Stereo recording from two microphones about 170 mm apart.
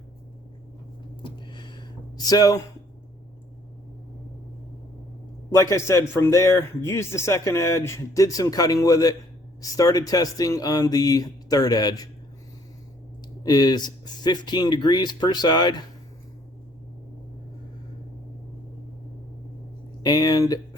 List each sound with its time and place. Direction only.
1.2 s a sound: 25° left (ahead or behind)
5.5 s speech: 20° left (ahead or behind)
13.4 s speech: 25° left (ahead or behind)
20.0 s speech: 25° left (ahead or behind)